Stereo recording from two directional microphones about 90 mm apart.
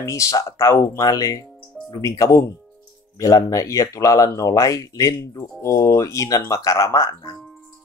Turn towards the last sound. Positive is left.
turn(degrees=40)  # may be behind; listen again after turning